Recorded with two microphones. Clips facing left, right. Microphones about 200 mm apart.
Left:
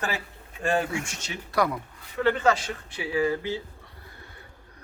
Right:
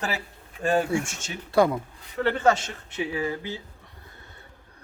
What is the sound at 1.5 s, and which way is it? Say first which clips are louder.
Speech: right 5 dB; 25° right (ahead or behind).